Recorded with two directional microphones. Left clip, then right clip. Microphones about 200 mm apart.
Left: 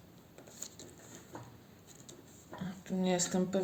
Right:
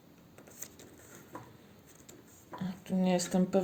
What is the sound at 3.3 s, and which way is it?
Speech, 40° right (ahead or behind).